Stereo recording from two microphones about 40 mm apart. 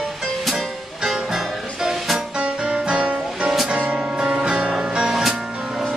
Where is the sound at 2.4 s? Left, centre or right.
Right.